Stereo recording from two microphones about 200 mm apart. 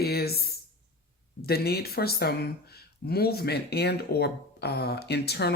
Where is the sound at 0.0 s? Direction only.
50° left (ahead or behind).